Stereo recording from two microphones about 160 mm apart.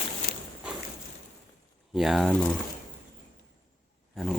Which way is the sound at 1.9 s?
Centre (ahead or behind).